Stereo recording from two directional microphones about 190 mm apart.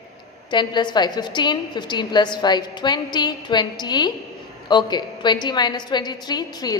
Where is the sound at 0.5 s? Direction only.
25° left (ahead or behind).